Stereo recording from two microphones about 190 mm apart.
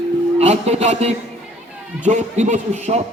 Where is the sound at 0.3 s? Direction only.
35° right (ahead or behind).